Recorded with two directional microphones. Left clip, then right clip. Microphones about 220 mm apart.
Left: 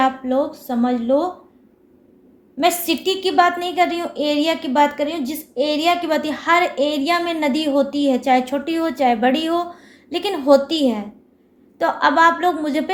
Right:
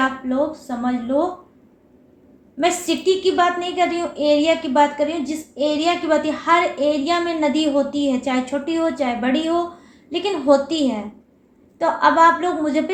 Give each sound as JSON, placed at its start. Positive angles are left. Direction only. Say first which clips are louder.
{"t": 0.0, "sound": "a woman's voice", "louder": "left 2 dB", "side_deg": 50}
{"t": 2.6, "sound": "a woman's voice", "louder": "left 1 dB", "side_deg": 50}